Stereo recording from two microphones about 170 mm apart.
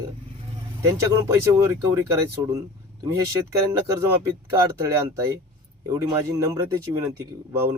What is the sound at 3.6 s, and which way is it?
Speech, 20° right (ahead or behind).